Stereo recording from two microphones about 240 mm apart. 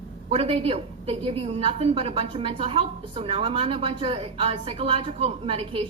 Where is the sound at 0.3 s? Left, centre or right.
Right.